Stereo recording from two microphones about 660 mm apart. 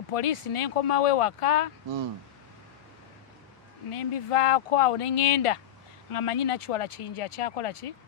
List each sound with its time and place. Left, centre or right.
0.1 s speech: left
3.9 s speech: left